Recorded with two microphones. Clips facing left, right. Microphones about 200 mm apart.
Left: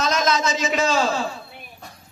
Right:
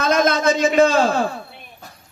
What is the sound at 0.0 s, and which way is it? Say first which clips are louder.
A man's voice: right 5 dB; 55° right (ahead or behind).